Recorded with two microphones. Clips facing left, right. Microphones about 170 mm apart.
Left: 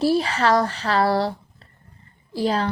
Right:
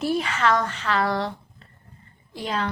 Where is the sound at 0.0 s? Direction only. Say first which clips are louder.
Left 4 dB; 35° left (ahead or behind).